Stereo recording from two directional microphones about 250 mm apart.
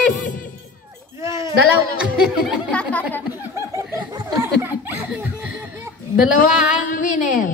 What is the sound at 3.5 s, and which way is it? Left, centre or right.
Laughter, centre.